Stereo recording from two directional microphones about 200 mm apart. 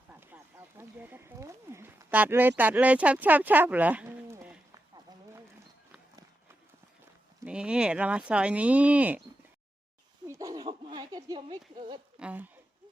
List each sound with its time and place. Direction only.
0.1 s speech: 10° right (ahead or behind)
7.4 s speech: 5° right (ahead or behind)
10.2 s speech: 15° right (ahead or behind)
12.2 s speech: 10° right (ahead or behind)